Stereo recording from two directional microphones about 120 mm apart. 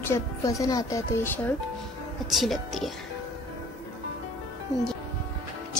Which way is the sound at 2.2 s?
Centre (ahead or behind).